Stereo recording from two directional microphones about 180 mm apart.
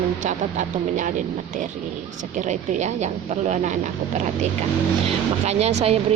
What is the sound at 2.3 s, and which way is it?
Speech, 40° right (ahead or behind).